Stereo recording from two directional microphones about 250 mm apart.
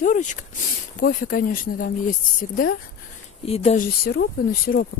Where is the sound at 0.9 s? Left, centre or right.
Left.